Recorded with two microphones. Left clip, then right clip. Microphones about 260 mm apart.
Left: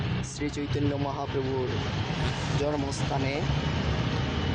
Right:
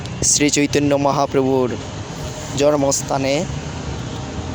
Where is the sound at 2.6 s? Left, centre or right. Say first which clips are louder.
Right 16 dB; right.